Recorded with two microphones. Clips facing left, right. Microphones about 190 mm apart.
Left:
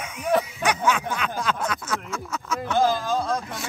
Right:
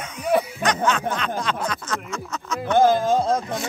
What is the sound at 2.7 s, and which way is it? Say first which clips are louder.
Speech: right 5 dB; 55° right (ahead or behind).